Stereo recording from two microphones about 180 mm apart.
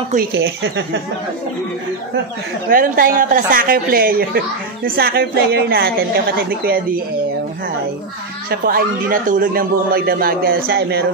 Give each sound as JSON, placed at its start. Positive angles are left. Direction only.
{"t": 0.1, "sound": "a woman's voice", "side_deg": -55}
{"t": 2.7, "sound": "a woman's voice", "side_deg": -50}
{"t": 8.5, "sound": "a woman's voice", "side_deg": -55}